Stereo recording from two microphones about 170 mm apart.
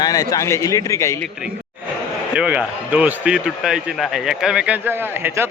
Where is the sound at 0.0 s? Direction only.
20° left (ahead or behind).